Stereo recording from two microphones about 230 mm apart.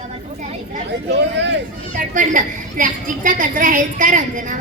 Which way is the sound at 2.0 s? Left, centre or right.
Right.